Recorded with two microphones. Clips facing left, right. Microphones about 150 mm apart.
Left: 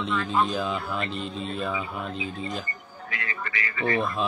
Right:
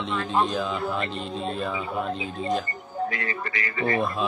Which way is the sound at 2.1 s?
35° right (ahead or behind).